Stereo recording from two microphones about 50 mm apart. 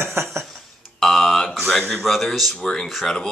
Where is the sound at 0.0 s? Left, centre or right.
Right.